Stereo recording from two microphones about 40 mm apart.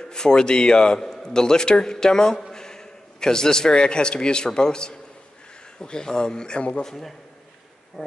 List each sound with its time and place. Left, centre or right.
0.1 s a man's voice: centre
6.8 s a man's voice: centre